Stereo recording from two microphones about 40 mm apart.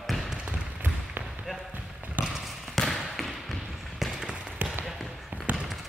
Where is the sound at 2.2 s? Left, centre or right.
Right.